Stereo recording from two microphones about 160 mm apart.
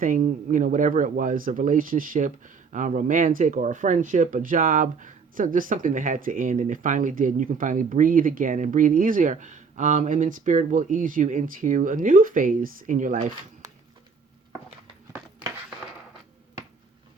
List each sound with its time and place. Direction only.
0.0 s speech: 55° right (ahead or behind)